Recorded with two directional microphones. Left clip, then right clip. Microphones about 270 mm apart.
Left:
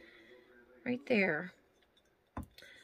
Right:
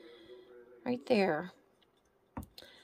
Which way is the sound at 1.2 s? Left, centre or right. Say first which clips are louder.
Right 1 dB; right.